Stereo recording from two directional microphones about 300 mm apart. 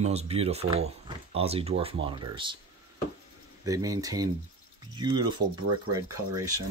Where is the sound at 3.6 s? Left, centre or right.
Centre.